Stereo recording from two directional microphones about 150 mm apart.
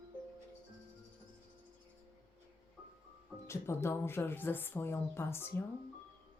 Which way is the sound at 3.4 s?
20° left (ahead or behind).